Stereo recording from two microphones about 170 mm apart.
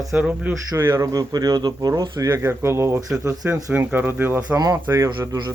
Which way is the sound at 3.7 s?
10° right (ahead or behind).